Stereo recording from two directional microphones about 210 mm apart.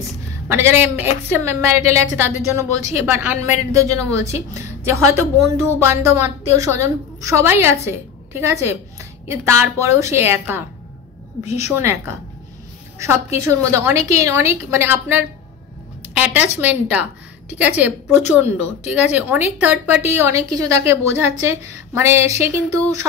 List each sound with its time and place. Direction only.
0.5 s speech: 10° right (ahead or behind)
13.4 s speech: 15° right (ahead or behind)
16.6 s speech: 5° right (ahead or behind)